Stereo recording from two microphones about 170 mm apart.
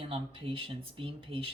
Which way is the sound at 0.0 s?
30° right (ahead or behind).